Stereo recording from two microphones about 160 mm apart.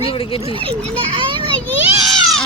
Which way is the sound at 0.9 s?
30° right (ahead or behind).